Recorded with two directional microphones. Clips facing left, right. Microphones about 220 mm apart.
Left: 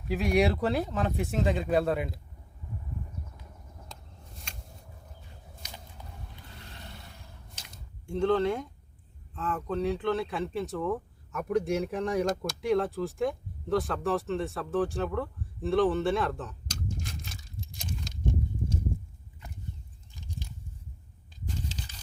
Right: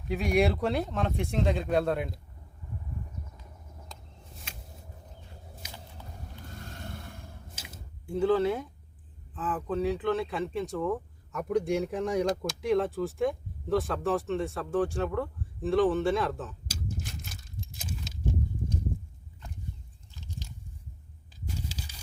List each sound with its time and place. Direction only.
0.1 s speech: centre (ahead or behind)
4.5 s vehicle: 5° right (ahead or behind)
6.3 s a sound: 45° right (ahead or behind)
7.5 s a sound: 5° right (ahead or behind)
9.3 s speech: 5° right (ahead or behind)
20.1 s chewing: 15° left (ahead or behind)
21.7 s horse: 10° right (ahead or behind)